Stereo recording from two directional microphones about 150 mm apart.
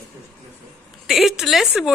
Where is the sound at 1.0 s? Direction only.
Centre (ahead or behind).